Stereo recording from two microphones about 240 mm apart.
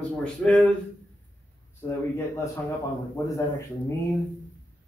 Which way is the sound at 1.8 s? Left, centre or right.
Centre.